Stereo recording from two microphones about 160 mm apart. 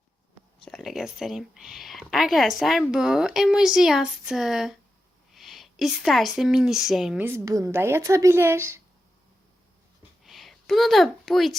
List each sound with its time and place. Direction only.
0.6 s a woman's voice: centre (ahead or behind)
7.3 s a woman's voice: 20° right (ahead or behind)
10.2 s a woman's voice: centre (ahead or behind)